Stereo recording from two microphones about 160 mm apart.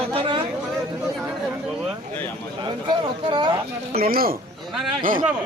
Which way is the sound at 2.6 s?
30° right (ahead or behind).